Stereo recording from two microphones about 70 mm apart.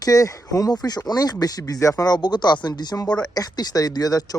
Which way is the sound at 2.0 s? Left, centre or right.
Left.